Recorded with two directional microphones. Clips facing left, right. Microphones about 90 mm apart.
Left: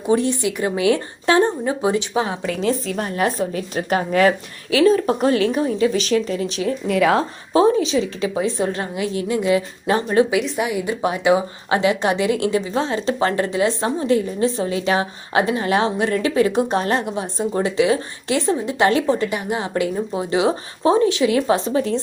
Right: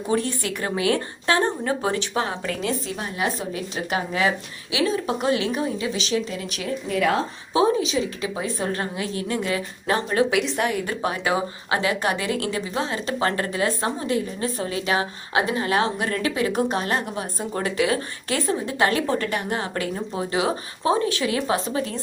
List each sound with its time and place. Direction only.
0.1 s a woman's voice: 20° left (ahead or behind)
2.9 s a woman's voice: 50° left (ahead or behind)
6.5 s a woman's voice: 30° left (ahead or behind)
9.6 s a woman's voice: 25° left (ahead or behind)
10.2 s a woman's voice: centre (ahead or behind)
11.0 s a woman's voice: 20° left (ahead or behind)
17.1 s a woman's voice: 20° left (ahead or behind)